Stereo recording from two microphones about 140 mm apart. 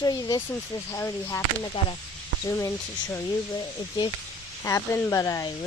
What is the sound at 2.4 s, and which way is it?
Speech, 20° left (ahead or behind).